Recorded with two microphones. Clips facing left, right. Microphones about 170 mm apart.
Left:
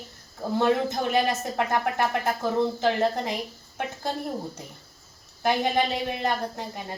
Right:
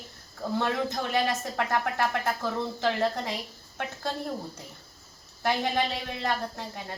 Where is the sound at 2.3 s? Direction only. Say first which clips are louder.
Left 5 dB; 15° left (ahead or behind).